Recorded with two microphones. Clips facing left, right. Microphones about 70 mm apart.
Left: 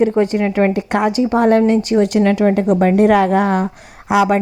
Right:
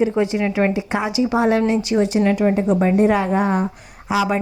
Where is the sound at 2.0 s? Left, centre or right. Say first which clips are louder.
Left 3 dB; left.